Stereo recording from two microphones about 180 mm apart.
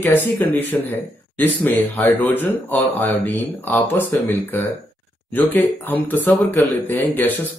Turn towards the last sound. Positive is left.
turn(degrees=10)  # may be behind; listen again after turning